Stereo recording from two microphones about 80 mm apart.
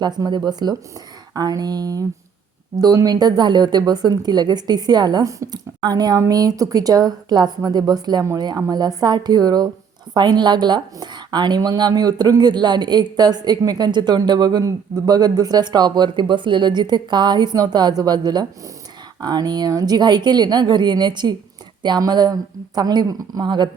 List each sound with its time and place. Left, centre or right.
0.3 s a woman's voice: right
6.1 s a woman's voice: right